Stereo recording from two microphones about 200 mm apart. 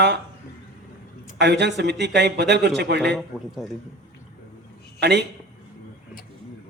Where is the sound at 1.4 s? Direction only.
60° right (ahead or behind).